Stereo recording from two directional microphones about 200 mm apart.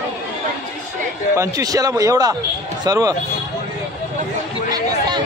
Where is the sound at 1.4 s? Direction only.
15° right (ahead or behind).